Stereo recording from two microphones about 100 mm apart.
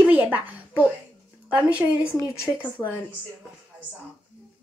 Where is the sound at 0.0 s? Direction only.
20° right (ahead or behind).